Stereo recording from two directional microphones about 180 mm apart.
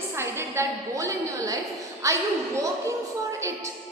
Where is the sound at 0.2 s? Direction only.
15° right (ahead or behind).